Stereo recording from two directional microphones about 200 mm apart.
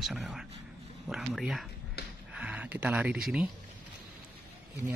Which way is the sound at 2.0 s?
55° left (ahead or behind).